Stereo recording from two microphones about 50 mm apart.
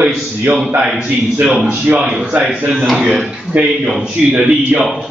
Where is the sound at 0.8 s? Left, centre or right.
Centre.